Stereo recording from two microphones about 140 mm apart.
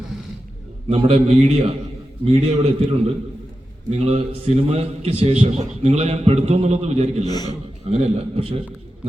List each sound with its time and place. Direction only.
0.9 s a man's voice: 45° right (ahead or behind)
7.3 s a man's voice: 30° left (ahead or behind)
7.9 s a man's voice: 45° right (ahead or behind)